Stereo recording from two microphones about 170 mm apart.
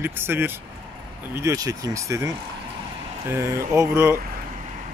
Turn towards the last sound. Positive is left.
turn(degrees=-15)  # may be behind; listen again after turning